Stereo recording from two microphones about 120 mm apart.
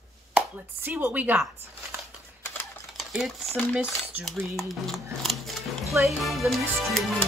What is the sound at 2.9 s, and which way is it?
Stir, centre (ahead or behind).